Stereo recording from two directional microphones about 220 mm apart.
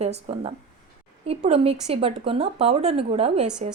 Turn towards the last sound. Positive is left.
turn(degrees=-25)  # may be behind; listen again after turning